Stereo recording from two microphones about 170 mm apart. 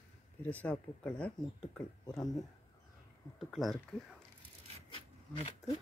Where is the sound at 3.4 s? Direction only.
Centre (ahead or behind).